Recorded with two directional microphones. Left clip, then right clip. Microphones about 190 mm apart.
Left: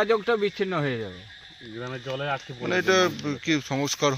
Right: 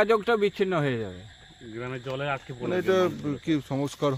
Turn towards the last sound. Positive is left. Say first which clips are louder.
# left 2 dB
turn(degrees=0)  # may be behind; listen again after turning